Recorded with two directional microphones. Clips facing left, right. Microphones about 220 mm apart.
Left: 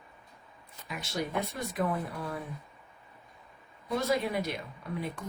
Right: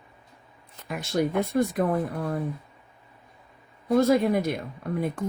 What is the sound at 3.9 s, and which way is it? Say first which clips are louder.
Speech: right 9 dB; 50° right (ahead or behind).